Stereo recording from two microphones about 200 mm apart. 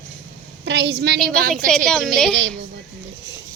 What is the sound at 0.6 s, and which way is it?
Speech, 65° right (ahead or behind).